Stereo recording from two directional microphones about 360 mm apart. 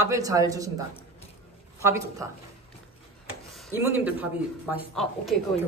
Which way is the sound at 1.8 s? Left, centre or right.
Centre.